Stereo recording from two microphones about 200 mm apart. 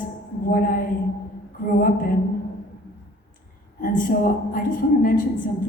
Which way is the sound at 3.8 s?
40° left (ahead or behind).